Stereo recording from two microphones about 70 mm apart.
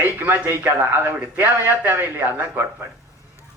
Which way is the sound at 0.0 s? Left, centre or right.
Right.